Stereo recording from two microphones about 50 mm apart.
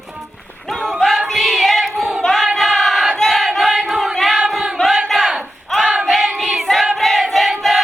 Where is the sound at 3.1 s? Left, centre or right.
Centre.